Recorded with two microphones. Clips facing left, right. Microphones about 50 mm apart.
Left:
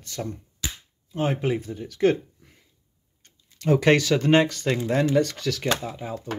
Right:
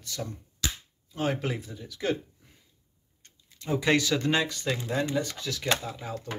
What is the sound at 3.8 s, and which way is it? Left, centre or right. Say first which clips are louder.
Speech: left 4 dB; left.